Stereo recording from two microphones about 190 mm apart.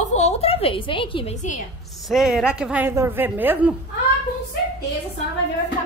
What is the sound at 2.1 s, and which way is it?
A woman's voice, centre (ahead or behind).